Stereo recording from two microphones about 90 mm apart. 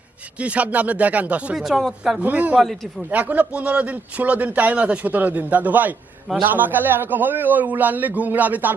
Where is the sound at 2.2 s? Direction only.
20° right (ahead or behind).